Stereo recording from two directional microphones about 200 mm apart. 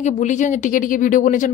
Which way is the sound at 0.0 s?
35° left (ahead or behind).